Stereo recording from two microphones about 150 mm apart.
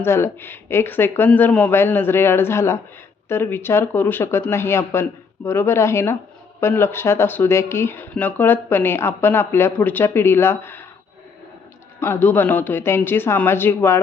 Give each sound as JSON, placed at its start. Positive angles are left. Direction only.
{"t": 0.0, "sound": "speech", "side_deg": 15}
{"t": 11.9, "sound": "speech", "side_deg": 15}